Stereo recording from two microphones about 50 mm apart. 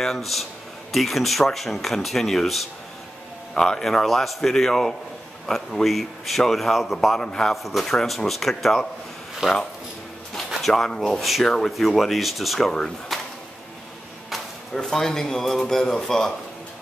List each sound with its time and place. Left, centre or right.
0.0 s a man's voice: centre
7.2 s a man's voice: centre
7.5 s speech: centre
9.4 s speech: centre
10.5 s speech: centre
13.1 s a sound: centre
14.7 s a man's voice: centre